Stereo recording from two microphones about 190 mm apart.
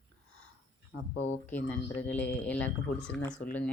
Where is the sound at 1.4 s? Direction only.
10° left (ahead or behind).